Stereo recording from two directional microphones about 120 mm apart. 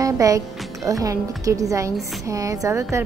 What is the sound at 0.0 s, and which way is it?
A woman's voice, 30° right (ahead or behind).